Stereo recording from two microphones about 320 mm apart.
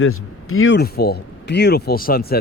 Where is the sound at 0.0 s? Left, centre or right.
Left.